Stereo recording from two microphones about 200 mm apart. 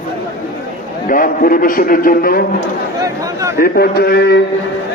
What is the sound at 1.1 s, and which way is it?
A man's voice, 45° left (ahead or behind).